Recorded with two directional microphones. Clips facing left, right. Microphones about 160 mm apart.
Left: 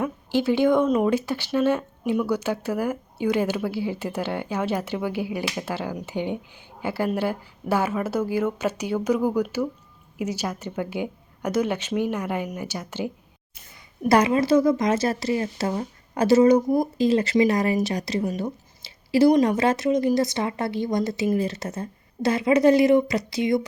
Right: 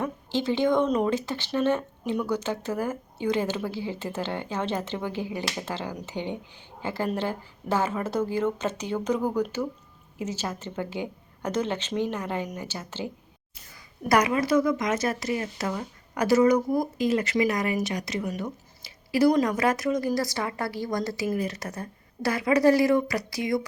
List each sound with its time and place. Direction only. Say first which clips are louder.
0.0 s speech: left 4 dB; 10° left (ahead or behind)
13.5 s speech: left 1 dB; 25° left (ahead or behind)